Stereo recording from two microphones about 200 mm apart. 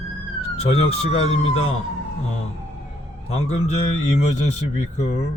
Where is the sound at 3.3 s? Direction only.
35° left (ahead or behind).